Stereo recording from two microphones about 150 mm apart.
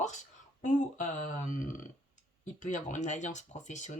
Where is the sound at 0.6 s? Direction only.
60° left (ahead or behind).